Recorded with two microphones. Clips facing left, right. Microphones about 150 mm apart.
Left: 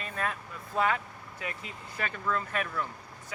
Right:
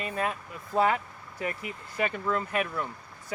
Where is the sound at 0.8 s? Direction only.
30° right (ahead or behind).